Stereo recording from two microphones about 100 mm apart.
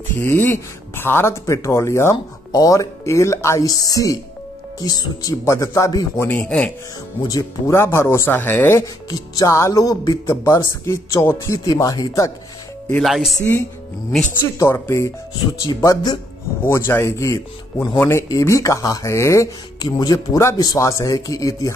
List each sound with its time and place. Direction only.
0.1 s speech: 20° left (ahead or behind); by 7.7 s 35° left (ahead or behind)
7.7 s speech: 25° left (ahead or behind)
13.0 s speech: centre (ahead or behind)
13.4 s speech: 25° left (ahead or behind)
15.6 s speech: 35° left (ahead or behind)
16.6 s speech: 25° left (ahead or behind)
19.8 s speech: 40° left (ahead or behind)